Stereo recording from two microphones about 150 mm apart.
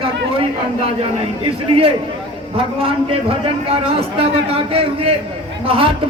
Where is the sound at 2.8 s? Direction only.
40° right (ahead or behind).